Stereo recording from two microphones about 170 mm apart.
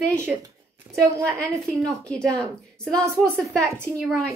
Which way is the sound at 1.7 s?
20° right (ahead or behind).